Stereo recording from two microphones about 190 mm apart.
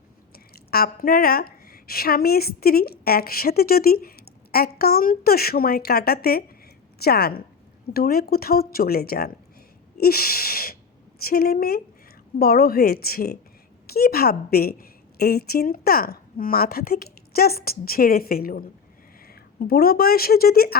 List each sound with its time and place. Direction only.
0.3 s a woman's voice: 55° left (ahead or behind)